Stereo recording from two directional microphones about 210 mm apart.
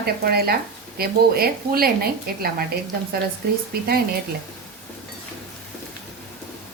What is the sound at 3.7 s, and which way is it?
Speech, 50° right (ahead or behind).